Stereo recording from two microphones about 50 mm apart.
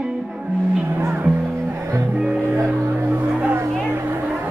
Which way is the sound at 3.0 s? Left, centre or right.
Right.